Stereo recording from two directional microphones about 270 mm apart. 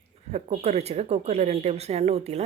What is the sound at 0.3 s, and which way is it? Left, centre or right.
Speech, right.